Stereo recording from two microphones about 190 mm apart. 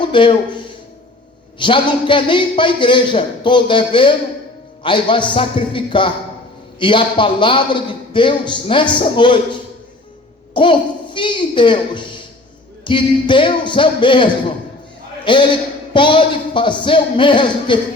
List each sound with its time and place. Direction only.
0.0 s a man's voice: 25° left (ahead or behind)